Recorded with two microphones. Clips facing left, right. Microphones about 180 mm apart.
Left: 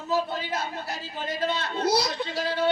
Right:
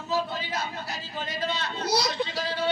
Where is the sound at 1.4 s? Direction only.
55° left (ahead or behind).